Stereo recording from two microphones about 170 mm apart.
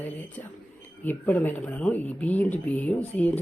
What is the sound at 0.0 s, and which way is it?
Speech, 10° left (ahead or behind).